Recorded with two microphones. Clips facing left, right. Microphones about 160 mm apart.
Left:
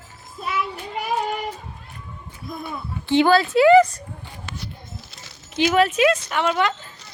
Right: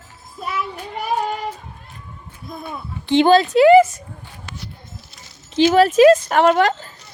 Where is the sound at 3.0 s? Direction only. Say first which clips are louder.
Right 3 dB; 20° right (ahead or behind).